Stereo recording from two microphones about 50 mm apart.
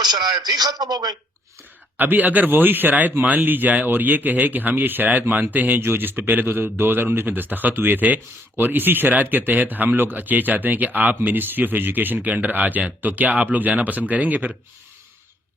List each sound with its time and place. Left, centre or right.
2.0 s a man's voice: right
5.8 s a man's voice: right